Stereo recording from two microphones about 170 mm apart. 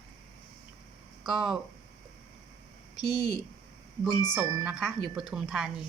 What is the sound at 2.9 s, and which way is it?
Speech, 25° left (ahead or behind).